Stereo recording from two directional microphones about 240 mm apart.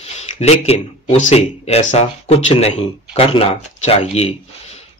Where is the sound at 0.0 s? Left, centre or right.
Left.